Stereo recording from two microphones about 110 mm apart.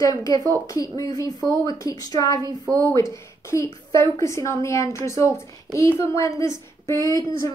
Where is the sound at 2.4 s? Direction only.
35° right (ahead or behind).